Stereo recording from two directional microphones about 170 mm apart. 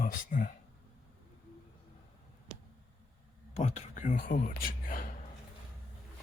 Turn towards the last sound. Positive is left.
turn(degrees=55)  # may be behind; listen again after turning